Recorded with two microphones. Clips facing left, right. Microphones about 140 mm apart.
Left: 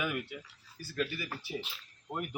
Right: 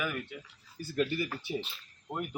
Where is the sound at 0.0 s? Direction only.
15° left (ahead or behind).